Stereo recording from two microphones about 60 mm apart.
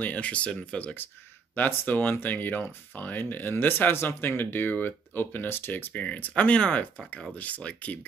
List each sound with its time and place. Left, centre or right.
0.0 s speech: left